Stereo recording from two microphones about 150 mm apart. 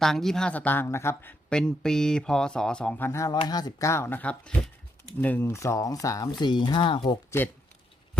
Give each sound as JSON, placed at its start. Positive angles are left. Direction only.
{"t": 0.0, "sound": "speech", "side_deg": 0}
{"t": 7.3, "sound": "speech", "side_deg": 15}